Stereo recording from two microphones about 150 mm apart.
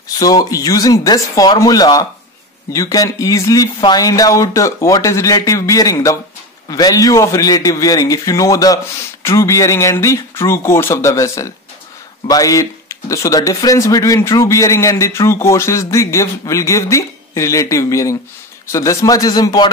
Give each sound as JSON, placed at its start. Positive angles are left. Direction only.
{"t": 0.2, "sound": "speech", "side_deg": 25}